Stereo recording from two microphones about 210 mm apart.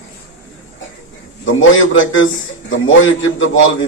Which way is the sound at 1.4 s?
65° left (ahead or behind).